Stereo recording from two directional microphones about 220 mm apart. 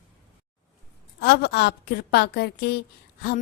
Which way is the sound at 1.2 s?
50° left (ahead or behind).